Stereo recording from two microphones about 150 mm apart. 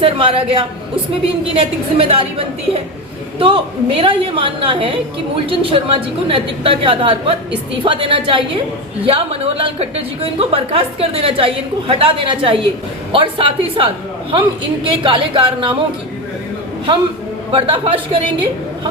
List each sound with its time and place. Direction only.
0.0 s a woman's voice: 35° right (ahead or behind)
3.3 s a woman's voice: 35° right (ahead or behind)
17.5 s a woman's voice: 35° right (ahead or behind)